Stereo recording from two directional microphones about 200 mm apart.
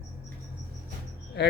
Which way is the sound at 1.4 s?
60° left (ahead or behind).